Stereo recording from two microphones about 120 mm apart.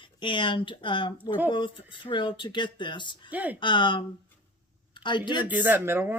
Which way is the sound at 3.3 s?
15° right (ahead or behind).